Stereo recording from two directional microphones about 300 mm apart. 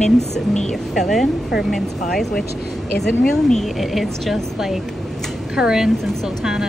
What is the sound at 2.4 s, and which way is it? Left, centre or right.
Speech, left.